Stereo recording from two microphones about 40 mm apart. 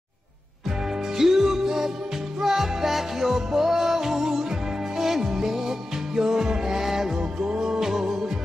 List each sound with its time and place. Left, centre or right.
1.1 s music: centre
7.2 s music: right